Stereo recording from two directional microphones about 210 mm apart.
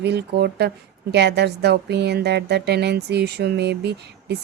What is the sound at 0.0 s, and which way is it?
Speech, 55° right (ahead or behind).